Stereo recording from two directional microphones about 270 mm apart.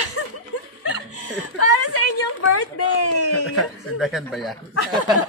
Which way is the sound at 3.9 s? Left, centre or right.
Centre.